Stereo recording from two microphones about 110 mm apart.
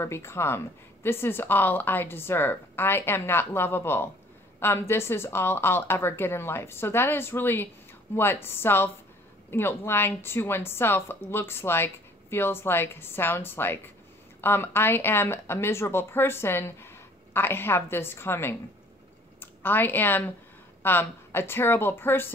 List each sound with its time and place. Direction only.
0.0 s a woman's voice: 25° left (ahead or behind)